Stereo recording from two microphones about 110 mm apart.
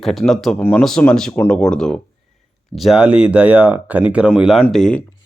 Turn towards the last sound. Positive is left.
turn(degrees=5)  # may be behind; listen again after turning